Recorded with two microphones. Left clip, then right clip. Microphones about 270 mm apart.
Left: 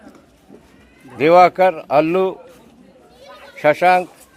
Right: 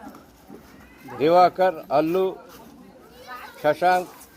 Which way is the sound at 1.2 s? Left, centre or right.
Left.